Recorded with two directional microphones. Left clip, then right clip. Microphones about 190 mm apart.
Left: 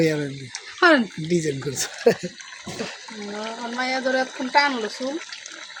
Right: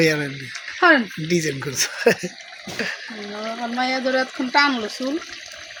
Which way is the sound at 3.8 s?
45° right (ahead or behind).